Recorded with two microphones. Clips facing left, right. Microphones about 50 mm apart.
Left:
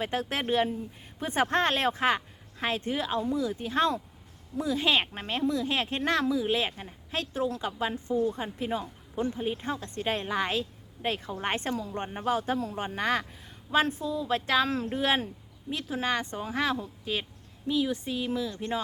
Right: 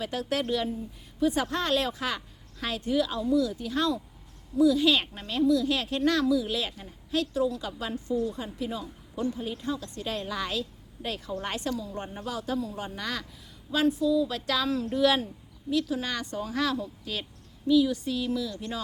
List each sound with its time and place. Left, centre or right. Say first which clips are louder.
0.0 s a woman's voice: right 1 dB; left